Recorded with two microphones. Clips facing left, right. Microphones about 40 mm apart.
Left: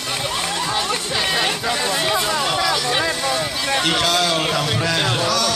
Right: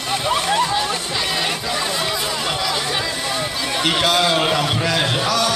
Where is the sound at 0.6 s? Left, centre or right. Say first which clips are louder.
Right 1 dB; centre.